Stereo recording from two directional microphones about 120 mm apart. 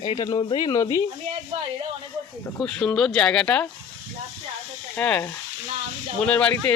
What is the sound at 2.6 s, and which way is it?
Speech, 10° left (ahead or behind).